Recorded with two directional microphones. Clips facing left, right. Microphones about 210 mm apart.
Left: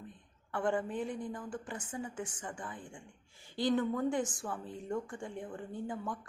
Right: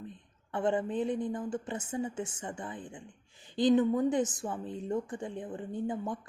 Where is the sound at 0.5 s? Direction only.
20° right (ahead or behind).